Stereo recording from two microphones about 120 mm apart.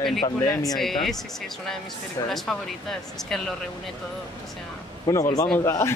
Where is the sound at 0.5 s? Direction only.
30° left (ahead or behind).